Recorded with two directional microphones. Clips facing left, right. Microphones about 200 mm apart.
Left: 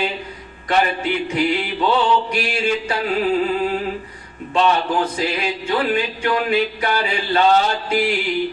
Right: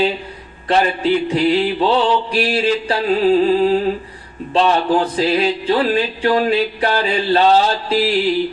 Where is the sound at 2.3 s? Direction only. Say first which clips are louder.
Right 4 dB; 35° right (ahead or behind).